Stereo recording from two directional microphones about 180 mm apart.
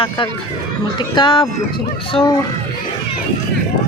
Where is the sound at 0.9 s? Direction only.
25° left (ahead or behind).